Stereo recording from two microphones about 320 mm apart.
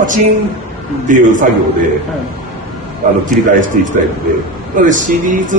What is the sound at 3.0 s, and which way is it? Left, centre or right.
A man's voice, right.